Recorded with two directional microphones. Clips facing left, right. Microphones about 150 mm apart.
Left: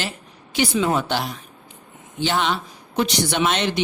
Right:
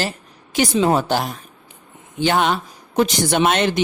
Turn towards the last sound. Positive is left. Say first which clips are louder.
# right 4 dB
turn(degrees=-50)  # may be behind; listen again after turning